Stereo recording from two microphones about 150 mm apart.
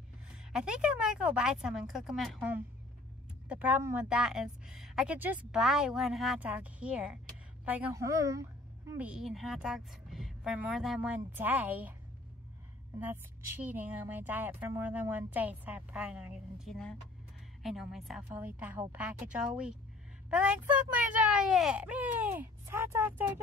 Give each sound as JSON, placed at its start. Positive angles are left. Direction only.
{"t": 0.3, "sound": "a woman's voice", "side_deg": -5}
{"t": 8.9, "sound": "a woman's voice", "side_deg": -10}
{"t": 13.0, "sound": "a woman's voice", "side_deg": -10}